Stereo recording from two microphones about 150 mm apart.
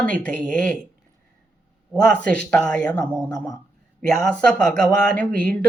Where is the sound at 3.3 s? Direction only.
20° left (ahead or behind).